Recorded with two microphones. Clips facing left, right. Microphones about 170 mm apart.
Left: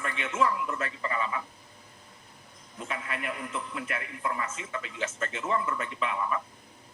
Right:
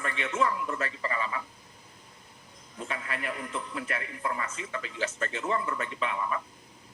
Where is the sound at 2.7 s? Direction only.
35° right (ahead or behind).